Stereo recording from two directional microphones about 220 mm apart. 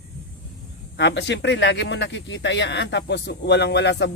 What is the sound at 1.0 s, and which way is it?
Speech, 50° left (ahead or behind).